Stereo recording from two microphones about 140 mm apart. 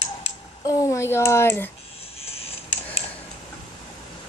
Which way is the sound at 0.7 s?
20° left (ahead or behind).